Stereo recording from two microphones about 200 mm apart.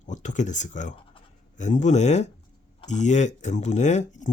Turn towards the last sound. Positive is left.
turn(degrees=35)  # may be behind; listen again after turning